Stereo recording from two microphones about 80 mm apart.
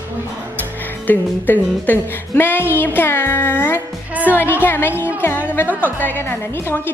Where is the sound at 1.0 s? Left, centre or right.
Left.